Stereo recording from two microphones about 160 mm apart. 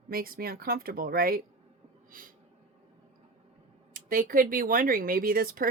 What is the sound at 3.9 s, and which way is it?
Speech, 65° right (ahead or behind).